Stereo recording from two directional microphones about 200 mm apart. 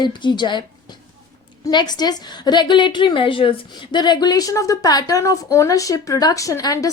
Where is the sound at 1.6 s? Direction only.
20° left (ahead or behind).